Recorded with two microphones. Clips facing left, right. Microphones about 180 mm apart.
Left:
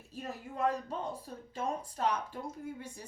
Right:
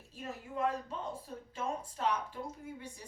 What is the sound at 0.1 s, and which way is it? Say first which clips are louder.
A woman's voice: left 1 dB; 40° left (ahead or behind).